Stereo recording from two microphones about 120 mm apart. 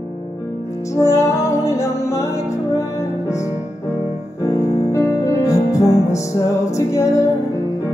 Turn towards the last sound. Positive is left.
turn(degrees=25)  # may be behind; listen again after turning